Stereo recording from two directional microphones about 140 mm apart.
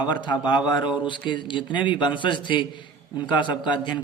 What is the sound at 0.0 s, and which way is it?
A man's voice, 30° left (ahead or behind).